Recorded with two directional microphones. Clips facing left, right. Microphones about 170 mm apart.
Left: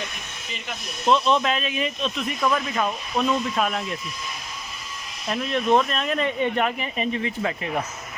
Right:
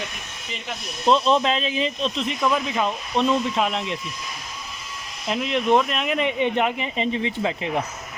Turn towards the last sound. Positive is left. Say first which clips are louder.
# right 2 dB
turn(degrees=-20)  # may be behind; listen again after turning